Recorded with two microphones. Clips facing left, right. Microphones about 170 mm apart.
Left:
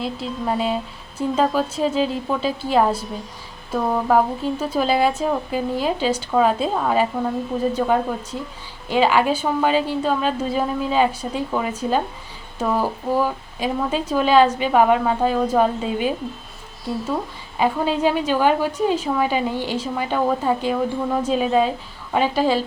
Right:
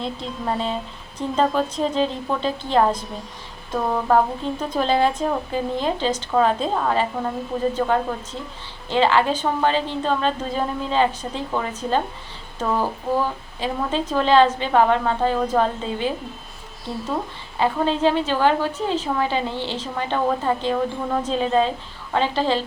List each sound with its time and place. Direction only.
0.0 s a woman's voice: 5° left (ahead or behind)
17.6 s a woman's voice: 10° left (ahead or behind)